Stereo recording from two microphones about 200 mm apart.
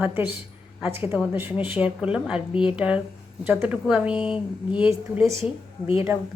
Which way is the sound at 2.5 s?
25° left (ahead or behind).